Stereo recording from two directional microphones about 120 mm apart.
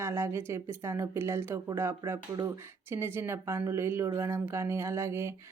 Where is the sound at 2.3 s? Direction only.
35° right (ahead or behind).